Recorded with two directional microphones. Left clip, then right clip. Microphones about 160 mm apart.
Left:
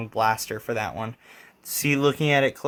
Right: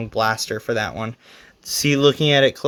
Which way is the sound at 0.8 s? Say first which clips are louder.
Right 4 dB; 35° right (ahead or behind).